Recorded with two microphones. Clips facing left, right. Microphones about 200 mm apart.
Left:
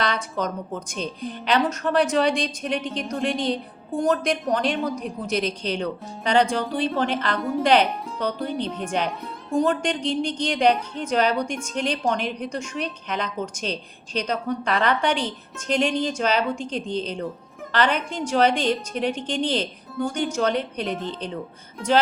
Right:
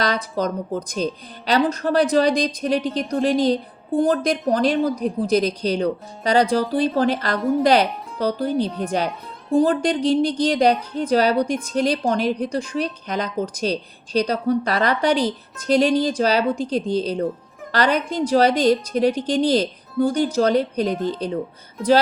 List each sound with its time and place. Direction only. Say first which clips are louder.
0.0 s a woman's voice: right 3 dB; 35° right (ahead or behind)